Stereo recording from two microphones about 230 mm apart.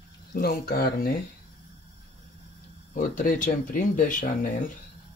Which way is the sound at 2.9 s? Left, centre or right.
Left.